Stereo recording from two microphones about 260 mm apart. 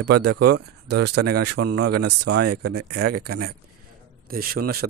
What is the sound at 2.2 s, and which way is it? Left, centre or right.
Speech, right.